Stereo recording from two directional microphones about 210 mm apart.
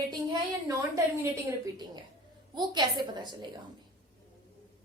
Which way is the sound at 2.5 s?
20° right (ahead or behind).